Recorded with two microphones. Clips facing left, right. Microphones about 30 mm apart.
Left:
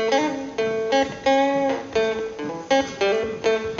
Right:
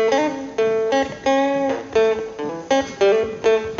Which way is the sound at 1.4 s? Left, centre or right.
Centre.